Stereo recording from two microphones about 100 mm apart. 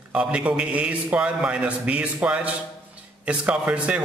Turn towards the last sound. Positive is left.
turn(degrees=-10)  # may be behind; listen again after turning